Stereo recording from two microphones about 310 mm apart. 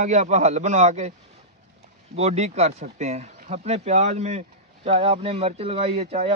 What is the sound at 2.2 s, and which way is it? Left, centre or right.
Speech, right.